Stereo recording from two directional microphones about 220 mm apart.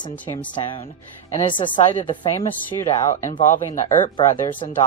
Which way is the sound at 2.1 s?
20° left (ahead or behind).